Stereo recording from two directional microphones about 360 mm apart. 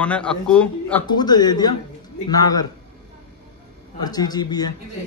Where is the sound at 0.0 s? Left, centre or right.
Centre.